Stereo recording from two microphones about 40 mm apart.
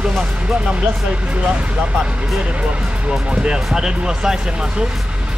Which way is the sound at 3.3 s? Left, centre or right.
Right.